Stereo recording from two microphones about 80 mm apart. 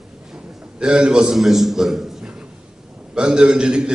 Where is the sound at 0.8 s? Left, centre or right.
Centre.